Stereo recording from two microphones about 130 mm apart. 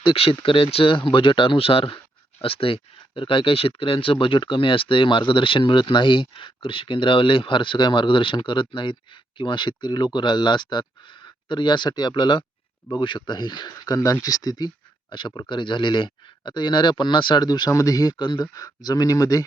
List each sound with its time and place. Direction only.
0.0 s speech: 45° left (ahead or behind); by 19.5 s 30° left (ahead or behind)